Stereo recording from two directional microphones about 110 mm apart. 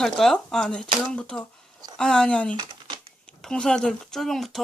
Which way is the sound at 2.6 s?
45° right (ahead or behind).